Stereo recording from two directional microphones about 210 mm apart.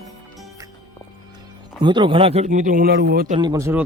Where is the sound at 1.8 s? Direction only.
20° right (ahead or behind); by 3.3 s 50° right (ahead or behind).